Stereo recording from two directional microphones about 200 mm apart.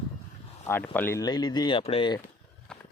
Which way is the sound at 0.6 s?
10° left (ahead or behind).